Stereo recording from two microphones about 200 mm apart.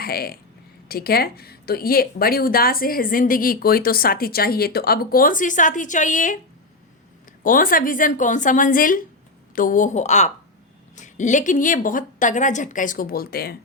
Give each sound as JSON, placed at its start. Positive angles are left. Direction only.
{"t": 0.0, "sound": "speech", "side_deg": 50}
{"t": 7.4, "sound": "a woman's voice", "side_deg": 45}